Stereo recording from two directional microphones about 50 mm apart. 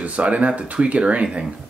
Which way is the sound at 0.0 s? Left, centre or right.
Right.